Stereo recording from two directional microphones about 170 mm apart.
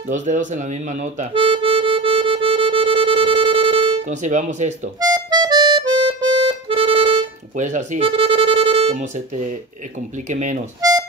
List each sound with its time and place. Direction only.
0.1 s speech: 45° right (ahead or behind)
1.3 s music: 30° right (ahead or behind)
4.0 s speech: 45° right (ahead or behind)
5.0 s accordion: 25° right (ahead or behind)
6.7 s music: 30° right (ahead or behind)
7.5 s speech: 45° right (ahead or behind)
10.8 s harmonica: 20° right (ahead or behind)